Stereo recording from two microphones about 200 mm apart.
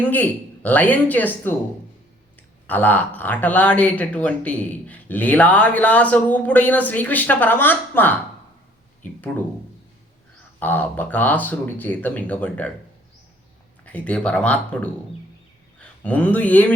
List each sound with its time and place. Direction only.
0.0 s speech: 10° left (ahead or behind)
2.6 s speech: 10° left (ahead or behind)
10.6 s speech: 10° left (ahead or behind)
13.8 s speech: 5° left (ahead or behind)